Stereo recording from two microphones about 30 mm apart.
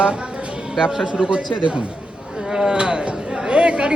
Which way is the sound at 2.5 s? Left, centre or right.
Right.